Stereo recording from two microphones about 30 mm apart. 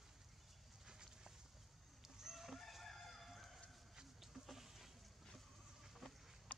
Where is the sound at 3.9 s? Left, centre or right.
Centre.